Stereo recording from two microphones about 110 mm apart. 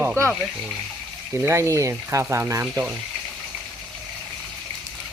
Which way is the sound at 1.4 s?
25° right (ahead or behind).